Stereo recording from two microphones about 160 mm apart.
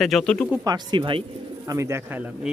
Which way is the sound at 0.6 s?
25° right (ahead or behind).